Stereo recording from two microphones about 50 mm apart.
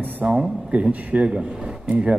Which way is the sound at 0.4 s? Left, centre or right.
Right.